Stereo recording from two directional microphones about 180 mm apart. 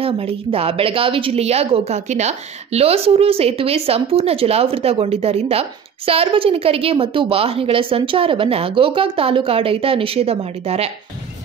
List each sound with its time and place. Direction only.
0.0 s a woman's voice: 30° right (ahead or behind)